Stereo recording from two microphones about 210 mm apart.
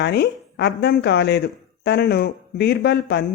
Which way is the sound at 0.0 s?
50° left (ahead or behind).